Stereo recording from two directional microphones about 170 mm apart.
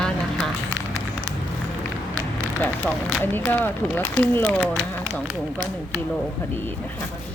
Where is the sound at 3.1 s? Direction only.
10° left (ahead or behind).